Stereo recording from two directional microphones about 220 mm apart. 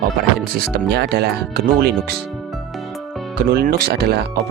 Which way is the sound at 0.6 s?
45° right (ahead or behind).